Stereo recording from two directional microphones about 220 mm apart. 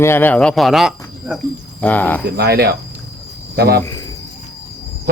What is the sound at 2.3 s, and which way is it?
Speech, 45° right (ahead or behind).